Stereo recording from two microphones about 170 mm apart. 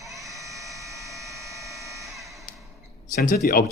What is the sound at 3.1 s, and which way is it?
Speech, 65° left (ahead or behind).